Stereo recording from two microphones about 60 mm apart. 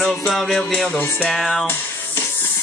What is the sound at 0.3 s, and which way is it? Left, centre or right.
Music, centre.